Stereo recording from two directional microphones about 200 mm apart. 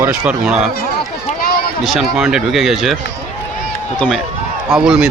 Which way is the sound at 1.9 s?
Centre (ahead or behind).